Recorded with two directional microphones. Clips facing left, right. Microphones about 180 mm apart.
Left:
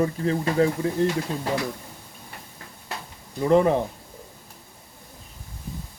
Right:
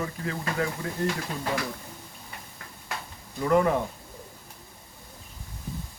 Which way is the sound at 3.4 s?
30° left (ahead or behind).